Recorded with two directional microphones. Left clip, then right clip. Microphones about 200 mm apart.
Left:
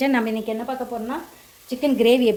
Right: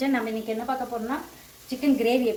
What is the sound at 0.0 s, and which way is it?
Speech, 45° left (ahead or behind).